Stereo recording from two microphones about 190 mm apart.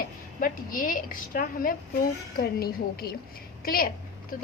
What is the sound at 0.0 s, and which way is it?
A woman's voice, 50° left (ahead or behind).